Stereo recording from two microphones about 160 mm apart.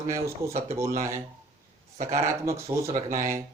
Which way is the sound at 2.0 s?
45° right (ahead or behind).